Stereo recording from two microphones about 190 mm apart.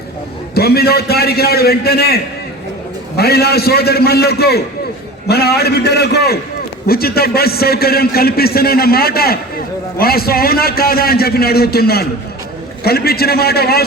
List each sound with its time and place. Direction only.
0.5 s a man's voice: 55° left (ahead or behind)